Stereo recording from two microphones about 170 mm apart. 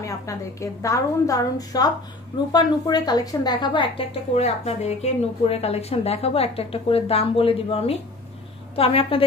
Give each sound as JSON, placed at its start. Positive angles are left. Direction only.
{"t": 0.0, "sound": "a woman's voice", "side_deg": 20}